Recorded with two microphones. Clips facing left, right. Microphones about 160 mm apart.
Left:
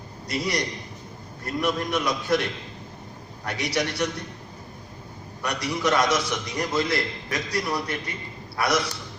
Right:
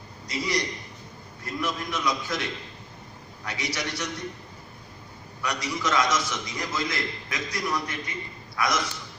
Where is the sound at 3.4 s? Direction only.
60° left (ahead or behind).